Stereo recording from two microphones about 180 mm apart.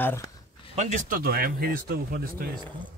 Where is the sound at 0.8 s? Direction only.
40° right (ahead or behind).